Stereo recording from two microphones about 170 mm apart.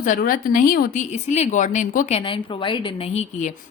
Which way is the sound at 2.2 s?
30° left (ahead or behind).